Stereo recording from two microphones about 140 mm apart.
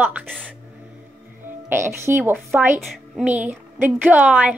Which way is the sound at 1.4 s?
15° right (ahead or behind).